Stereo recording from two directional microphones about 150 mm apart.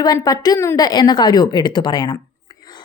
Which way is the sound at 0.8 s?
30° left (ahead or behind).